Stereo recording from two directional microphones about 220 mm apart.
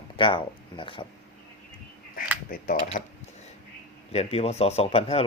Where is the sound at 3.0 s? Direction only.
35° left (ahead or behind).